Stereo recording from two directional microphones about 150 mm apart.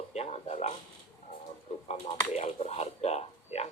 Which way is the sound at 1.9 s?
45° left (ahead or behind).